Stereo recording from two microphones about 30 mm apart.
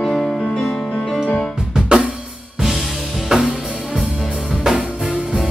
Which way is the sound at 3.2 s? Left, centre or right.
Centre.